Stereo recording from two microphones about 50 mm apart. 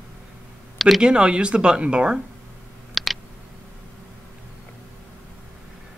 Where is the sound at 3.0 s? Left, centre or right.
Centre.